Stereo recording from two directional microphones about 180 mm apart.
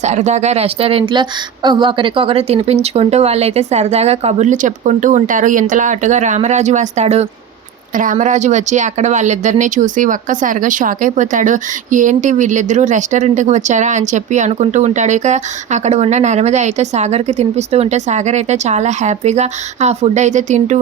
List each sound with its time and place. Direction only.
0.0 s speech: 40° right (ahead or behind)